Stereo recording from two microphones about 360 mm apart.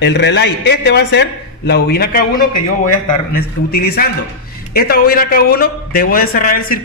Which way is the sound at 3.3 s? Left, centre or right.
Left.